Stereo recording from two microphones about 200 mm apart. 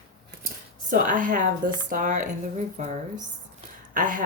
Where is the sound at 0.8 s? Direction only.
40° right (ahead or behind).